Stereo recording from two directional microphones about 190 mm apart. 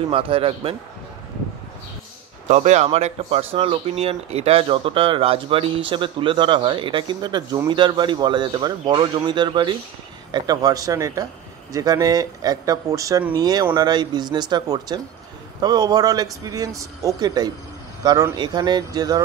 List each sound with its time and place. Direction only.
0.1 s speech: 30° right (ahead or behind)
2.4 s speech: 35° right (ahead or behind); by 19.2 s 20° right (ahead or behind)